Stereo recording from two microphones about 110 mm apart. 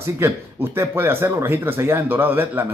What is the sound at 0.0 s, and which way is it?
A man's voice, 20° right (ahead or behind).